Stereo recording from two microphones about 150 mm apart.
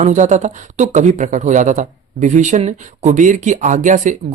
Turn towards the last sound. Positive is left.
turn(degrees=-55)  # may be behind; listen again after turning